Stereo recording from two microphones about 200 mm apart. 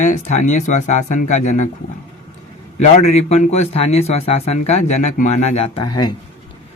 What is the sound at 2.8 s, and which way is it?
Speech, 35° left (ahead or behind).